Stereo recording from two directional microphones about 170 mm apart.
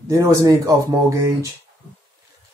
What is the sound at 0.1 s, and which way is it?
Speech, 20° right (ahead or behind).